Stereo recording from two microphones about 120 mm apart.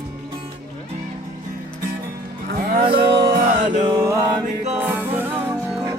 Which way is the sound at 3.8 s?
30° right (ahead or behind).